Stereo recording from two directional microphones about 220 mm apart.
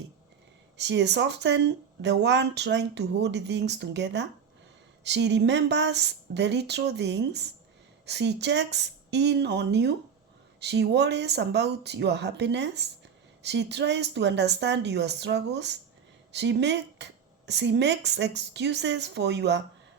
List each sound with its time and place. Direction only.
0.8 s speech: 50° right (ahead or behind)